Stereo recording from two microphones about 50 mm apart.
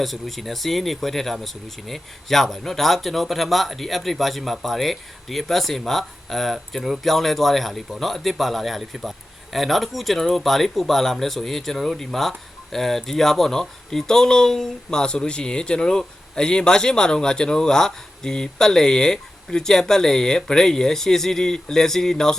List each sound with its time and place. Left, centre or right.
0.0 s speech: centre